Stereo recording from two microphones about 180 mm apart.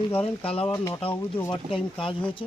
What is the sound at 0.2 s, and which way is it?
Speech, 30° left (ahead or behind).